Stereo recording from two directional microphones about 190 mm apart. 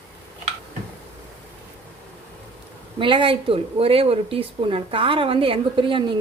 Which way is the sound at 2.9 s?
25° right (ahead or behind).